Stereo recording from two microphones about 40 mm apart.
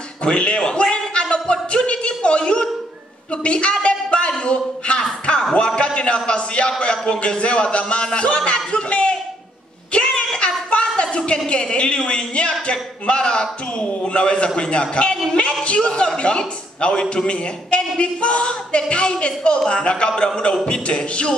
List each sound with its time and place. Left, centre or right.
0.2 s a man's voice: left
9.9 s a sound: left
11.4 s a man's voice: left